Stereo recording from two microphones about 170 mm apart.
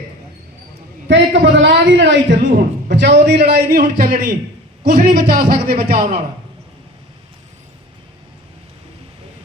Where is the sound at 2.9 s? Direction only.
90° right; by 6.0 s 60° right (ahead or behind).